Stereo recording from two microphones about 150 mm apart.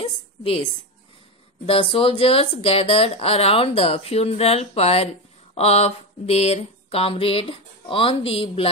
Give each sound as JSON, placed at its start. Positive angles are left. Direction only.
{"t": 0.0, "sound": "a woman's voice", "side_deg": 35}
{"t": 1.7, "sound": "speech", "side_deg": 35}